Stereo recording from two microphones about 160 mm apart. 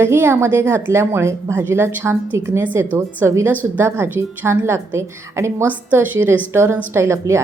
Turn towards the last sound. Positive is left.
turn(degrees=-15)  # may be behind; listen again after turning